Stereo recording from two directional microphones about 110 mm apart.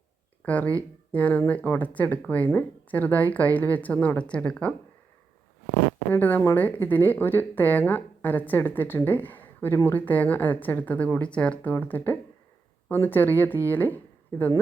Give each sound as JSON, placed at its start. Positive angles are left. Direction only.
{"t": 0.4, "sound": "speech", "side_deg": 15}
{"t": 6.1, "sound": "speech", "side_deg": 15}